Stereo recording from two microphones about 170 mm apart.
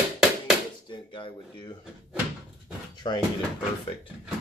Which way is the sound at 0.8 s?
30° left (ahead or behind).